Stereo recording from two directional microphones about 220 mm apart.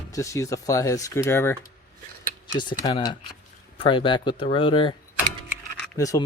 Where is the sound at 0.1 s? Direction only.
15° left (ahead or behind).